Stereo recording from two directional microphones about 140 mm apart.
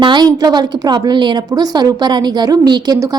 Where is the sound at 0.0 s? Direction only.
30° right (ahead or behind).